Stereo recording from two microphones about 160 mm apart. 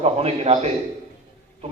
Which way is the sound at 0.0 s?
40° right (ahead or behind).